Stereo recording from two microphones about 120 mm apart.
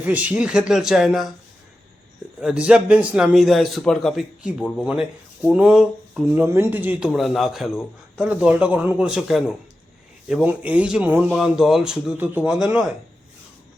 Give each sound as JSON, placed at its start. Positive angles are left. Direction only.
{"t": 0.0, "sound": "speech", "side_deg": -10}
{"t": 2.4, "sound": "a man's voice", "side_deg": -10}
{"t": 6.3, "sound": "speech", "side_deg": -20}
{"t": 7.1, "sound": "a man's voice", "side_deg": 0}
{"t": 10.4, "sound": "speech", "side_deg": -10}
{"t": 12.5, "sound": "a man's voice", "side_deg": -5}